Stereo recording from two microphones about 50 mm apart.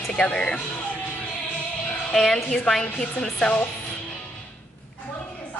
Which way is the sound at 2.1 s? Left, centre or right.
Centre.